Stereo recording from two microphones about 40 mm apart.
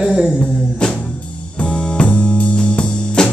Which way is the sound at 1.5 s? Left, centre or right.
Left.